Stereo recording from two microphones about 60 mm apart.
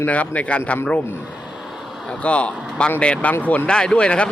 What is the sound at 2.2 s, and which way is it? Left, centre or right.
Speech, centre.